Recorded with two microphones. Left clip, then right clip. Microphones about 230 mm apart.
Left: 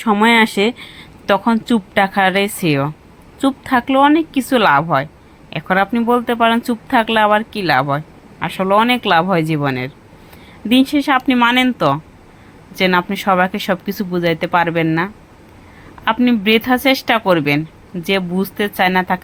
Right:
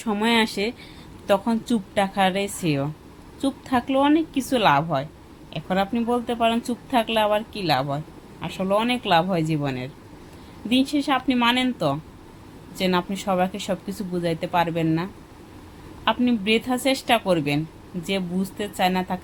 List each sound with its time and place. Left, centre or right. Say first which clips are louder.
0.0 s a woman's voice: left 10 dB; centre